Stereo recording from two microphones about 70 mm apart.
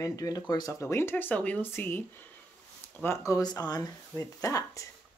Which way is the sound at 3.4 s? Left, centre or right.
Left.